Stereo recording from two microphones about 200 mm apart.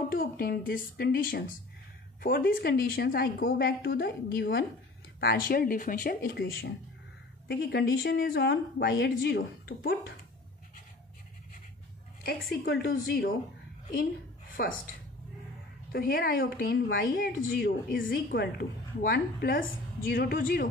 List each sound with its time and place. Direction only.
0.1 s a woman's voice: 45° left (ahead or behind)
12.6 s a woman's voice: 50° left (ahead or behind)
14.6 s a woman's voice: 50° left (ahead or behind)
15.9 s a woman's voice: 45° left (ahead or behind)